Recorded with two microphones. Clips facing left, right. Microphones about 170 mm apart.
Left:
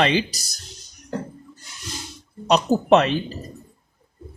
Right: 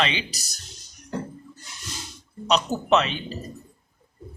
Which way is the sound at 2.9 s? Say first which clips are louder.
Left 4 dB; 55° left (ahead or behind).